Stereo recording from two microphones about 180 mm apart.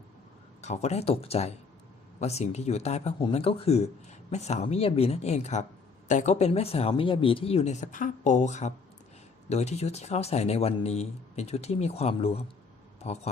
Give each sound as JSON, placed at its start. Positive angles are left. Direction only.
{"t": 0.6, "sound": "speech", "side_deg": 40}